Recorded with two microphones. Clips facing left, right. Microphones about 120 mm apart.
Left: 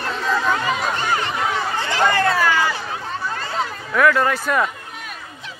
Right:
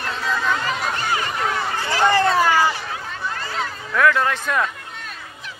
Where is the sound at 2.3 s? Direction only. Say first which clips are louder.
Right 1 dB; 20° right (ahead or behind).